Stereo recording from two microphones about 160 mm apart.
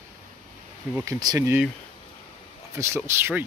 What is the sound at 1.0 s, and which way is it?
Speech, 20° right (ahead or behind).